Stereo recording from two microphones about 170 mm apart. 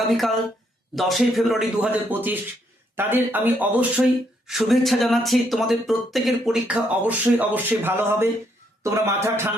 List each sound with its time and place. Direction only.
0.1 s a man's voice: centre (ahead or behind); by 9.5 s 15° right (ahead or behind)